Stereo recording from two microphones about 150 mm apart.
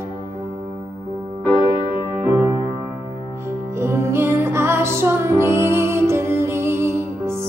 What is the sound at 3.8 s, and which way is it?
Music, 15° right (ahead or behind).